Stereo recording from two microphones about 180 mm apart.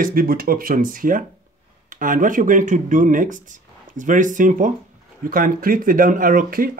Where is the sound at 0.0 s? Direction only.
55° right (ahead or behind).